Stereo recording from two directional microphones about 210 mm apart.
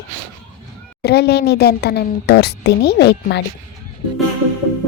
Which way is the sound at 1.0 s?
50° left (ahead or behind).